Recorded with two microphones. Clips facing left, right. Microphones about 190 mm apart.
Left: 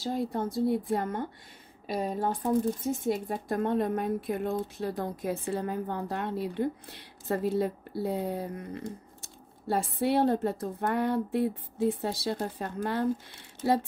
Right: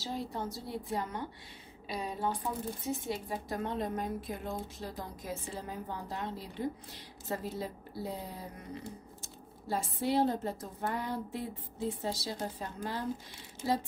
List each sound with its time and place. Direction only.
0.0 s a woman's voice: 50° left (ahead or behind)